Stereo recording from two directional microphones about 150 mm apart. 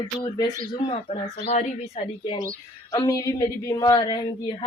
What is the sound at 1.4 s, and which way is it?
Speech, 45° left (ahead or behind).